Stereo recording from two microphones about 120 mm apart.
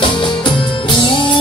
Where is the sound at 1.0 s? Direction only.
40° left (ahead or behind).